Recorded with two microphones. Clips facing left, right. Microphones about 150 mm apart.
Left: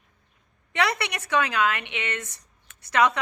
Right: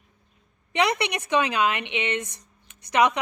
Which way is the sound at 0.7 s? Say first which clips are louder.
Right 3 dB; 20° right (ahead or behind).